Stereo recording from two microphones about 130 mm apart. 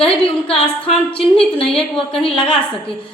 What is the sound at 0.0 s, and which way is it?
Speech, 45° left (ahead or behind).